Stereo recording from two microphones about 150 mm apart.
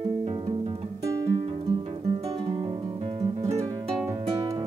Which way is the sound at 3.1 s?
45° right (ahead or behind).